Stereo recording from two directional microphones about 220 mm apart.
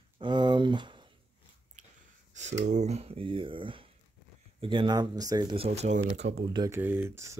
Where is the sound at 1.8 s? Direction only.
35° right (ahead or behind).